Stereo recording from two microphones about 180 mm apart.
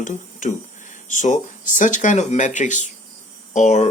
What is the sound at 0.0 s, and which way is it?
Speech, 45° left (ahead or behind).